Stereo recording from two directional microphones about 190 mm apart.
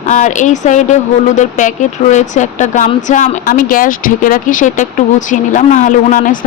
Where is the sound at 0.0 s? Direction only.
40° left (ahead or behind).